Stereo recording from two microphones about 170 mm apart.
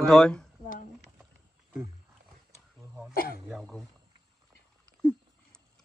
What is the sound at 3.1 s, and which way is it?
Speech, 60° left (ahead or behind).